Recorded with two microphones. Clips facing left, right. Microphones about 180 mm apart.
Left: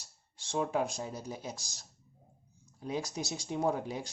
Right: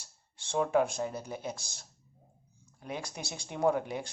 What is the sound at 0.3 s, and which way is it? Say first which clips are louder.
Speech: right 4 dB; 55° right (ahead or behind).